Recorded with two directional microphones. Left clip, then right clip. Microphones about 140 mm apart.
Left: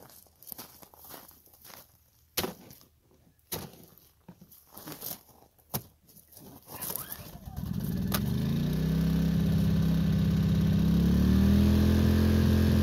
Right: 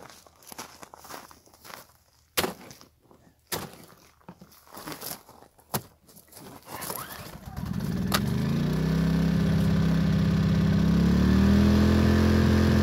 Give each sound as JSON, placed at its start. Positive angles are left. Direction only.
{"t": 0.0, "sound": "walk", "side_deg": 60}
{"t": 2.3, "sound": "wood", "side_deg": 25}
{"t": 3.4, "sound": "a sound", "side_deg": 25}
{"t": 7.0, "sound": "vehicle", "side_deg": 30}